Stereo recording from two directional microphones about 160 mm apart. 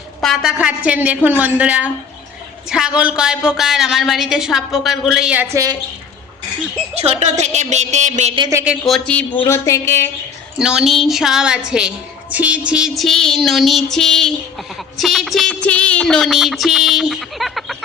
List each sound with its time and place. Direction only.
0.2 s a woman's voice: centre (ahead or behind); by 5.7 s 20° right (ahead or behind)
6.9 s a woman's voice: 40° right (ahead or behind)
8.5 s a woman's voice: 15° right (ahead or behind)
8.9 s speech: 10° left (ahead or behind)
10.6 s a woman's voice: 5° right (ahead or behind)